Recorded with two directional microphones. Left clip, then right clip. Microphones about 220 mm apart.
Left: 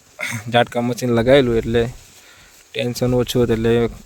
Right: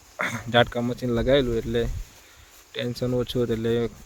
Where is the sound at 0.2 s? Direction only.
25° left (ahead or behind).